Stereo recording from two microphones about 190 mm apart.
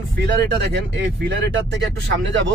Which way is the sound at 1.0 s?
70° right (ahead or behind).